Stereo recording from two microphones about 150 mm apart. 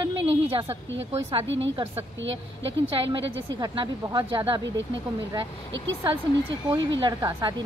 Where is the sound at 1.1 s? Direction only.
40° right (ahead or behind).